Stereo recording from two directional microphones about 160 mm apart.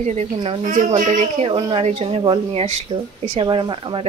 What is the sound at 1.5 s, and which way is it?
Speech, 35° right (ahead or behind).